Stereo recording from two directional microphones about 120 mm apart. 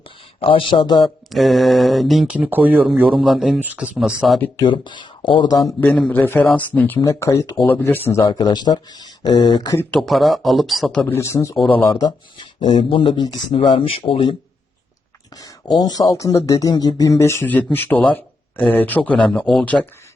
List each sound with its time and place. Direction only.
0.3 s speech: 45° left (ahead or behind)
1.3 s speech: centre (ahead or behind)
3.6 s speech: 15° right (ahead or behind)
3.9 s speech: 5° right (ahead or behind)
4.6 s speech: 40° left (ahead or behind)
5.8 s speech: 10° left (ahead or behind)
7.0 s speech: 25° left (ahead or behind)
7.5 s speech: 10° left (ahead or behind)
8.3 s speech: 40° left (ahead or behind)
9.9 s speech: centre (ahead or behind)
11.1 s speech: 25° left (ahead or behind)
12.5 s speech: 45° left (ahead or behind)
15.4 s speech: 30° left (ahead or behind); by 19.9 s 10° left (ahead or behind)